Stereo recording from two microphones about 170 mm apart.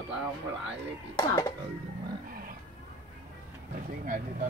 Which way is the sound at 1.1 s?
25° left (ahead or behind).